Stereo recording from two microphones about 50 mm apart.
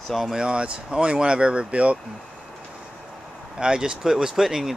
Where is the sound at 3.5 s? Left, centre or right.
Centre.